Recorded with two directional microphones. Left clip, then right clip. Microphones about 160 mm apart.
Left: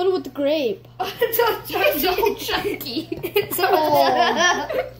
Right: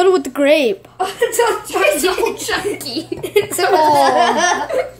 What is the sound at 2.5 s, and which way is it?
Speech, 20° right (ahead or behind).